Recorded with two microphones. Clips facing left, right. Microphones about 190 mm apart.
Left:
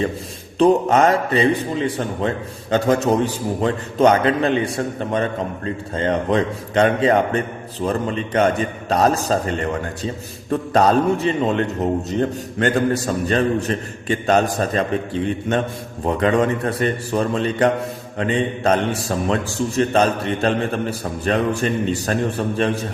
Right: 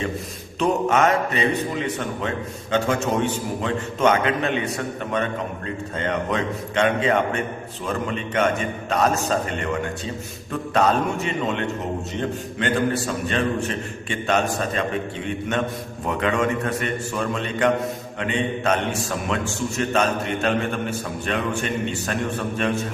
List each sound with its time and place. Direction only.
0.6 s a man's voice: 35° left (ahead or behind)